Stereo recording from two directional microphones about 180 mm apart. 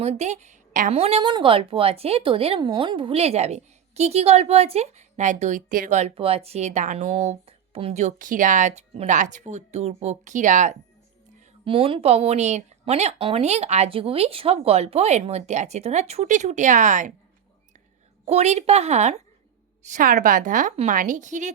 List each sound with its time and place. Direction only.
0.0 s a woman's voice: 35° right (ahead or behind)
11.6 s a woman's voice: 30° right (ahead or behind)
18.3 s a woman's voice: 35° right (ahead or behind)
19.9 s a woman's voice: 50° right (ahead or behind)